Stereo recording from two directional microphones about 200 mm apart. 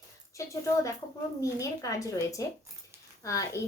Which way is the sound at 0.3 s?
15° left (ahead or behind).